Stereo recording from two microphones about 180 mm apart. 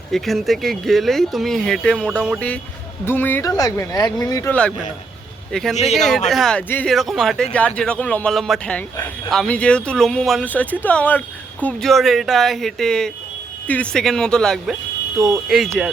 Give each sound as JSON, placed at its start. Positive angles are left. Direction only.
{"t": 0.1, "sound": "speech", "side_deg": 0}
{"t": 3.1, "sound": "speech", "side_deg": 10}
{"t": 5.5, "sound": "speech", "side_deg": 0}